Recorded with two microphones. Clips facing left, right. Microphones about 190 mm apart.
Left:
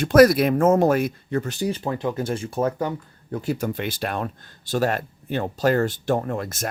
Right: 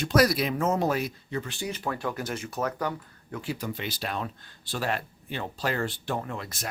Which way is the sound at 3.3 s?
45° left (ahead or behind).